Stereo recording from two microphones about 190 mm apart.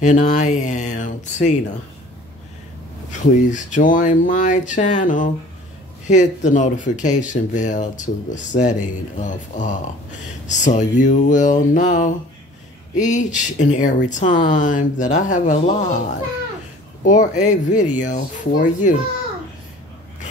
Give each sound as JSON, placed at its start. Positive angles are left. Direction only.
{"t": 0.0, "sound": "speech", "side_deg": 40}
{"t": 3.1, "sound": "speech", "side_deg": 40}